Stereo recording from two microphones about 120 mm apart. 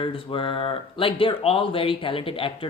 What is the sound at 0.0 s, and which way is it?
Speech, 45° left (ahead or behind).